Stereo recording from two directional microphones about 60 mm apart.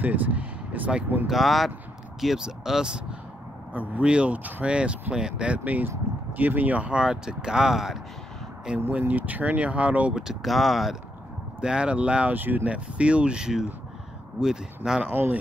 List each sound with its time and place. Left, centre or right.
0.0 s speech: right
1.2 s speech: centre
3.7 s speech: right
4.6 s speech: centre
8.7 s speech: right
10.4 s speech: centre
11.6 s speech: centre
12.4 s speech: right
12.7 s speech: centre